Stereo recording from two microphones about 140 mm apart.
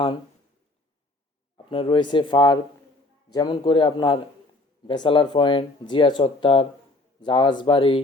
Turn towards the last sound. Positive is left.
turn(degrees=40)  # may be behind; listen again after turning